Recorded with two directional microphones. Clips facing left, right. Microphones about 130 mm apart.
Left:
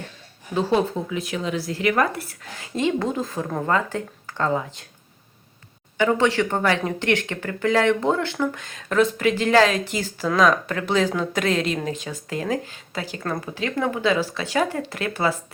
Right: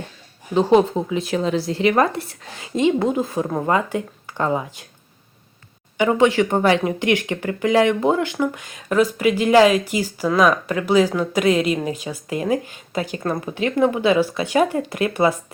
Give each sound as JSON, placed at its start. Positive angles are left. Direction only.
{"t": 0.5, "sound": "speech", "side_deg": -20}
{"t": 6.0, "sound": "speech", "side_deg": -15}